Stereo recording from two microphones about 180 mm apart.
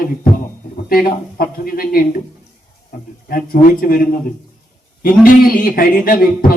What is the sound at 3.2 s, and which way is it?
Speech, 55° left (ahead or behind).